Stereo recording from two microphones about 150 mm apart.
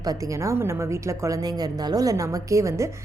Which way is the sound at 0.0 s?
25° right (ahead or behind).